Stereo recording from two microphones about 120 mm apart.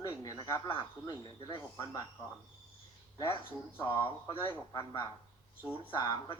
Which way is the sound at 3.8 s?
20° left (ahead or behind).